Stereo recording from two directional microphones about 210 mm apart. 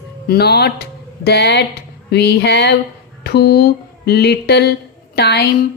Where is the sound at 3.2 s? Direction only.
50° left (ahead or behind).